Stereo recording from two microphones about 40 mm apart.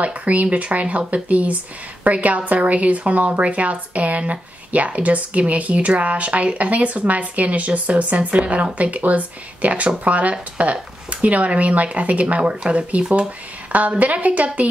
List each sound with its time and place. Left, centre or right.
0.0 s a woman's voice: right